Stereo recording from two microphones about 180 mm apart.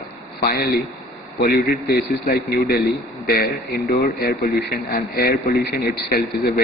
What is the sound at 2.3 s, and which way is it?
Speech, 50° left (ahead or behind).